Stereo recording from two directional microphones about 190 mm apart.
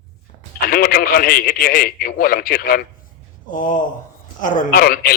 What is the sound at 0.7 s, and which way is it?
A man's voice, 50° left (ahead or behind).